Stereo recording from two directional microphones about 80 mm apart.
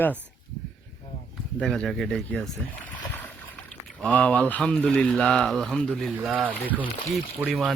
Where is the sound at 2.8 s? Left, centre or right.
Left.